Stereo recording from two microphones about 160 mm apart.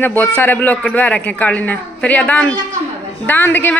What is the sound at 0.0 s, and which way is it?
A woman's voice, 15° left (ahead or behind).